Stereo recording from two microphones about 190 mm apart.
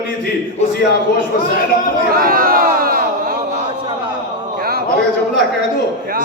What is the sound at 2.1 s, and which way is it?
Crowd, 50° right (ahead or behind).